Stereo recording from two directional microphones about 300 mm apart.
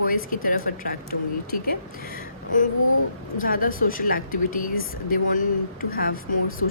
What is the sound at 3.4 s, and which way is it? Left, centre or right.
A woman's voice, left.